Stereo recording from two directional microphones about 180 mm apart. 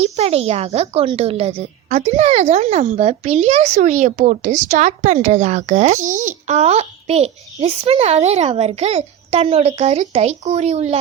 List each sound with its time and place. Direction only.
0.0 s speech: 35° right (ahead or behind)